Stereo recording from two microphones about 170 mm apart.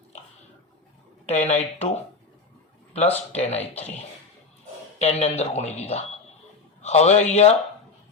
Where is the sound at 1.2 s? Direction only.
40° left (ahead or behind).